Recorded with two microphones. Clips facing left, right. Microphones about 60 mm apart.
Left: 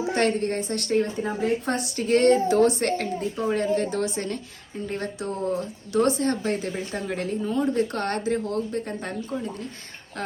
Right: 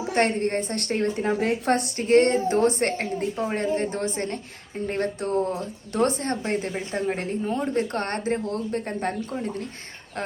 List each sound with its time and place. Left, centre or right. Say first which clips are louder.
0.1 s speech: right 2 dB; right